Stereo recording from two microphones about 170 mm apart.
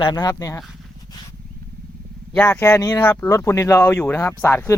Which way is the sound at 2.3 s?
10° left (ahead or behind).